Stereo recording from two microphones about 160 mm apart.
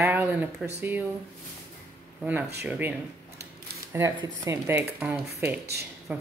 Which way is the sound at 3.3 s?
80° right.